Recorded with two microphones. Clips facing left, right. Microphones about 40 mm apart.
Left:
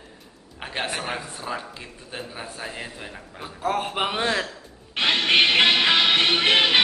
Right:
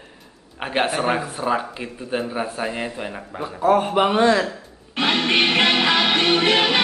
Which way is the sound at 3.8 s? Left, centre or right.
Centre.